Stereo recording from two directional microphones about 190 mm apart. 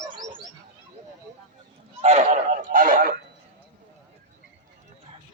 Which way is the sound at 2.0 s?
35° right (ahead or behind).